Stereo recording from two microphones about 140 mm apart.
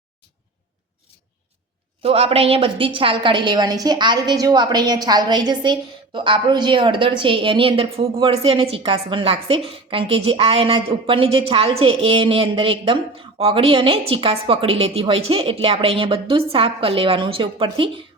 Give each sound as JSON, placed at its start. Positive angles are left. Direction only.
{"t": 2.0, "sound": "a woman's voice", "side_deg": -45}